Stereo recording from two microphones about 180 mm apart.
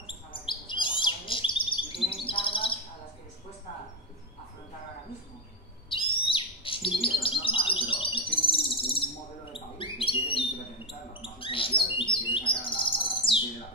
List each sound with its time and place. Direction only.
0.0 s chirp: 30° left (ahead or behind)
5.9 s owl: 30° left (ahead or behind)
6.3 s bird: 30° left (ahead or behind)
10.9 s a sound: 30° left (ahead or behind)
12.3 s bird: 30° left (ahead or behind)